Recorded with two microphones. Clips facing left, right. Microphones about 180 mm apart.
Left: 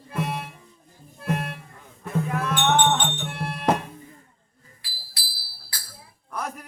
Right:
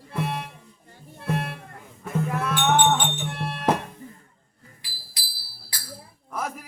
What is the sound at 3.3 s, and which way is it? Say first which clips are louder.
Music: even; centre (ahead or behind).